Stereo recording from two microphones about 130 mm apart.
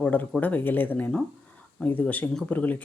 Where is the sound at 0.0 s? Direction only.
10° left (ahead or behind).